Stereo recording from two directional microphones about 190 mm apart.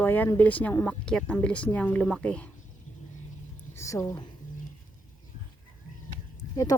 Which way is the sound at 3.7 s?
15° left (ahead or behind).